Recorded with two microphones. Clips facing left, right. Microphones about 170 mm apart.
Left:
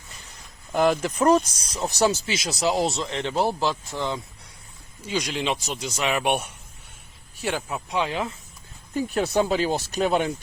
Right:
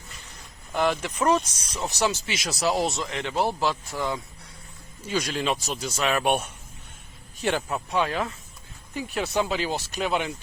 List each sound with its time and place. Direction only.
0.7 s speech: 40° left (ahead or behind)
3.3 s speech: centre (ahead or behind)
5.0 s speech: 15° left (ahead or behind)
9.0 s speech: 45° left (ahead or behind)